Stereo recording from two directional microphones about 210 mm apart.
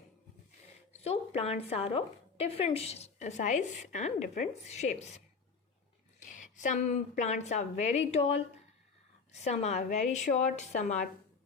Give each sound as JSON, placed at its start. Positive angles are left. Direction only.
{"t": 1.0, "sound": "a woman's voice", "side_deg": 30}